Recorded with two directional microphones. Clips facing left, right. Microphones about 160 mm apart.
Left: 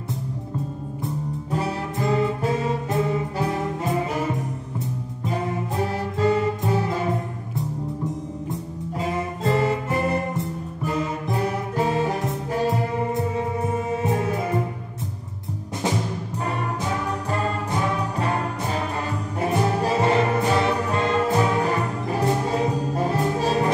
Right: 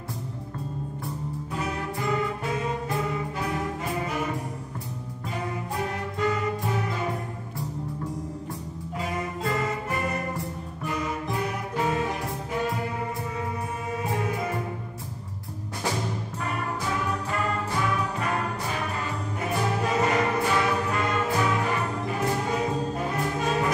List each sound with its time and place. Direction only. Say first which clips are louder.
1.5 s music: left 5 dB; 30° left (ahead or behind)
6.1 s music: left 6 dB; 30° left (ahead or behind)
17.3 s music: left 3 dB; 30° left (ahead or behind)